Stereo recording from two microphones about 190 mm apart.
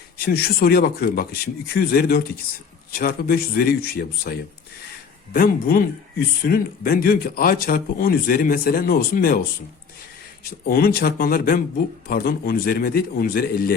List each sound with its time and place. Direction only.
0.2 s speech: 55° left (ahead or behind)
10.7 s speech: 50° left (ahead or behind)